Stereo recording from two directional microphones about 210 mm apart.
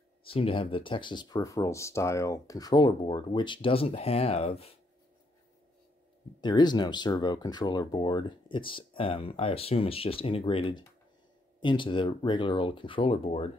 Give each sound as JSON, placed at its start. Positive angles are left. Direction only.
{"t": 0.2, "sound": "speech", "side_deg": 25}
{"t": 6.4, "sound": "speech", "side_deg": 20}